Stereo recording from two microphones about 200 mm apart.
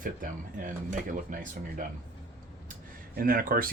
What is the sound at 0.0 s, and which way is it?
Speech, 40° right (ahead or behind).